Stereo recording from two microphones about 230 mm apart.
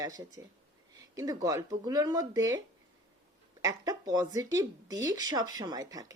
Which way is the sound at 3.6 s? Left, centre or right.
Centre.